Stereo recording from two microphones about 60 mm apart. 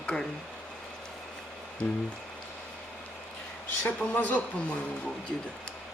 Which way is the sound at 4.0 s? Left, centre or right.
Left.